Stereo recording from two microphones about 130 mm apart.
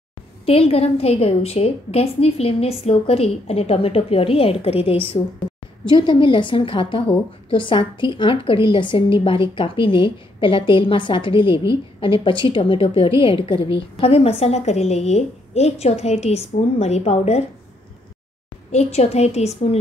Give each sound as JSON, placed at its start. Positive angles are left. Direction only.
{"t": 0.5, "sound": "a woman's voice", "side_deg": 50}
{"t": 18.7, "sound": "a woman's voice", "side_deg": 55}